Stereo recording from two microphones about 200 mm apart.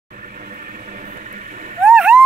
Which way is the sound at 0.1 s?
40° right (ahead or behind).